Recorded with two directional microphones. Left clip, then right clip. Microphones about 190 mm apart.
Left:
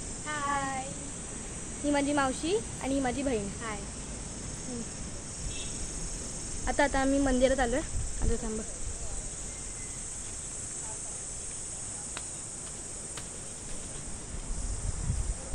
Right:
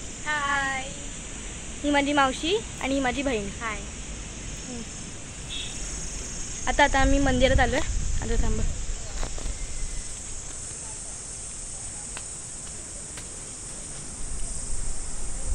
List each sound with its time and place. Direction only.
0.3 s child singing: 10° left (ahead or behind)
1.9 s a woman's voice: 20° right (ahead or behind)
6.6 s speech: centre (ahead or behind)